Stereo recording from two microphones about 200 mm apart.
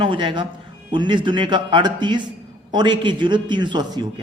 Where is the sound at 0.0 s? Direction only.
25° right (ahead or behind).